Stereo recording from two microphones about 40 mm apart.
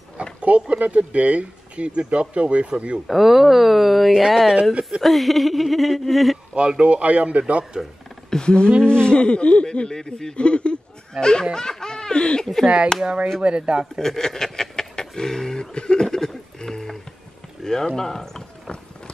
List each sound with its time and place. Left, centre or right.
0.4 s speech: right
3.1 s speech: centre
6.5 s speech: right
8.3 s speech: left
9.7 s a man's voice: centre
10.3 s speech: left
11.5 s laughter: centre
12.6 s speech: right
13.9 s speech: centre
16.5 s music: centre
17.6 s a sound: centre
17.9 s a man's voice: centre